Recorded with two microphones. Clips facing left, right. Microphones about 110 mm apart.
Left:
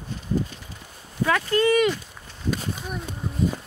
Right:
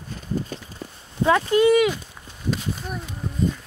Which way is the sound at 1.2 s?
20° right (ahead or behind).